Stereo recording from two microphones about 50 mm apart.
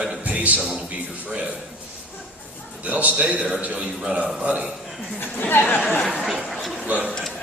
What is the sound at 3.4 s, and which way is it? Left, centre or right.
Speech, centre.